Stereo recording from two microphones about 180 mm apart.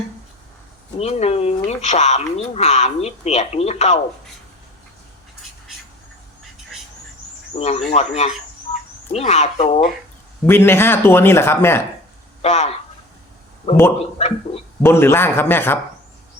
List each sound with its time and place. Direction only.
0.9 s speech: 35° left (ahead or behind)
7.5 s speech: 35° left (ahead or behind)
10.4 s speech: 15° left (ahead or behind)
12.4 s speech: 35° left (ahead or behind)
14.8 s speech: 15° left (ahead or behind)